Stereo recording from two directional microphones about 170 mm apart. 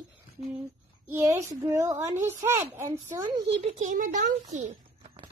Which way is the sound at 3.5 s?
40° right (ahead or behind).